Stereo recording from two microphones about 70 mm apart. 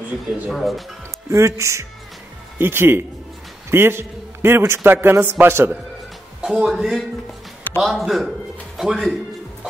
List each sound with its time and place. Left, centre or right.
0.5 s a man's voice: centre
1.3 s a man's voice: right
6.4 s a man's voice: centre